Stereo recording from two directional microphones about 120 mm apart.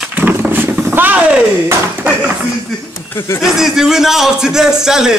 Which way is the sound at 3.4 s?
5° right (ahead or behind).